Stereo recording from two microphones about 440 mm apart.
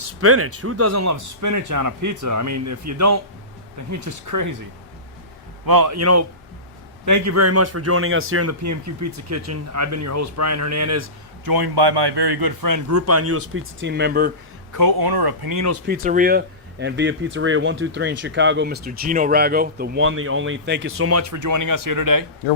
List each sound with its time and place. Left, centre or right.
0.2 s speech: right
5.6 s speech: right
11.4 s speech: right; by 14.3 s centre
14.7 s speech: right
15.9 s speech: centre; by 22.2 s right